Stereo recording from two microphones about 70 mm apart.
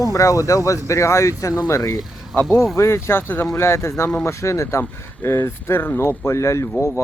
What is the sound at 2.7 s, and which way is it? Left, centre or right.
Speech, left.